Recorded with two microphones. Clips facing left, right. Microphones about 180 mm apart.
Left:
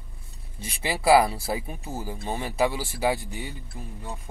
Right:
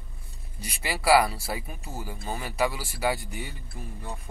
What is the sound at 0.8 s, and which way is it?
Speech, 25° left (ahead or behind).